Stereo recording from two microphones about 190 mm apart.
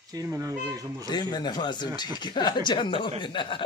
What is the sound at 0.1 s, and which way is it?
Speech, 15° right (ahead or behind).